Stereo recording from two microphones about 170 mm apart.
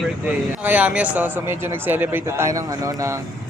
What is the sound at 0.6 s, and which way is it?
Speech, 10° right (ahead or behind).